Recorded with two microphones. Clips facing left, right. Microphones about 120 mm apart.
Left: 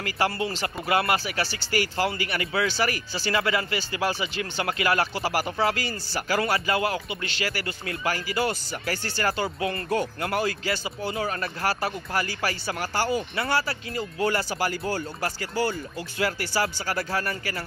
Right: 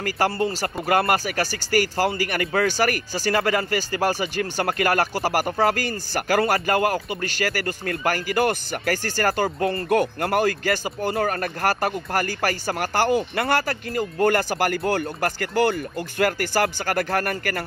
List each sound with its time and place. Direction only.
0.0 s speech: 45° right (ahead or behind)
9.8 s speech: 55° right (ahead or behind)